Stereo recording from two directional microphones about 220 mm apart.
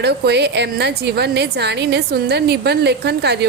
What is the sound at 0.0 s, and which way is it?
A woman's voice, 50° right (ahead or behind).